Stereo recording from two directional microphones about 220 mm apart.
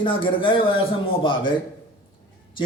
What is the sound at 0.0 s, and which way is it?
A man's voice, 20° left (ahead or behind).